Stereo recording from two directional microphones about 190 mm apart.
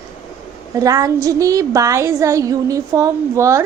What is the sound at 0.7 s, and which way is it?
A woman's voice, 15° right (ahead or behind).